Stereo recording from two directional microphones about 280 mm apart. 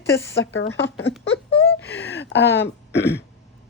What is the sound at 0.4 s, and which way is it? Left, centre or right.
Speech, left.